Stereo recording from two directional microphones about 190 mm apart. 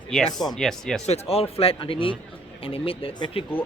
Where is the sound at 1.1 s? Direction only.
30° left (ahead or behind).